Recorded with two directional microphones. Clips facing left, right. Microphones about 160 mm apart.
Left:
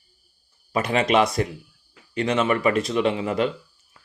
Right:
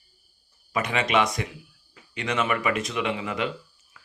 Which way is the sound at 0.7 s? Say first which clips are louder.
Left 4 dB; 35° left (ahead or behind).